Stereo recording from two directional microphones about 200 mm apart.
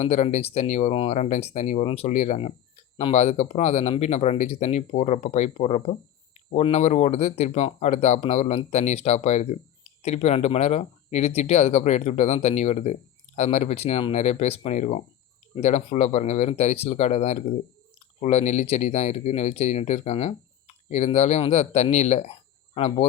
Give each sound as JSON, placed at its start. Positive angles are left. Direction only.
{"t": 0.0, "sound": "speech", "side_deg": 35}